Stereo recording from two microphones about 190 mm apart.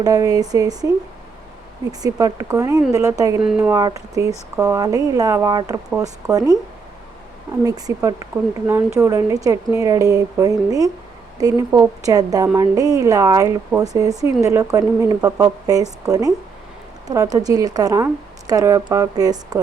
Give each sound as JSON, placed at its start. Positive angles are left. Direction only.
{"t": 0.0, "sound": "a woman's voice", "side_deg": -20}
{"t": 1.9, "sound": "speech", "side_deg": -20}
{"t": 3.4, "sound": "a woman's voice", "side_deg": -5}
{"t": 7.6, "sound": "a woman's voice", "side_deg": -20}